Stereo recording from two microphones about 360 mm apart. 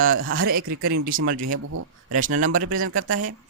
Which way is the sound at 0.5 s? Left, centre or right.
Right.